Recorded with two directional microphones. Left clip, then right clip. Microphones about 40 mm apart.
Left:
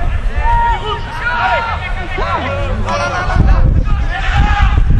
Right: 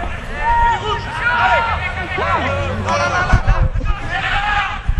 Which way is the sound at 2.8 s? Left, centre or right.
Centre.